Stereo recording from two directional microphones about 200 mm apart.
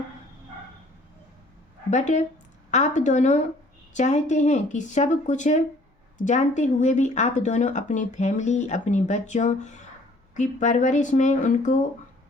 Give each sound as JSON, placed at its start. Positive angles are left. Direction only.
{"t": 1.9, "sound": "speech", "side_deg": 35}